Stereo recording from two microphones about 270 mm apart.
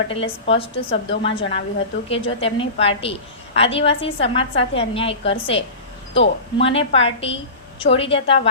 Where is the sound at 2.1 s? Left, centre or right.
Left.